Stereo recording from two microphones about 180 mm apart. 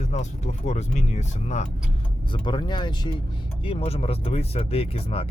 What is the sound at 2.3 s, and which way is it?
Speech, 25° left (ahead or behind).